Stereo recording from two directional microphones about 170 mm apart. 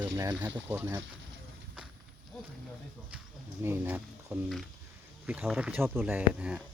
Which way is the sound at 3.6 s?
10° right (ahead or behind).